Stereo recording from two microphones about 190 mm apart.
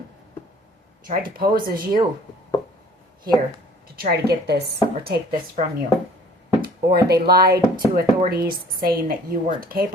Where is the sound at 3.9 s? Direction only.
55° right (ahead or behind).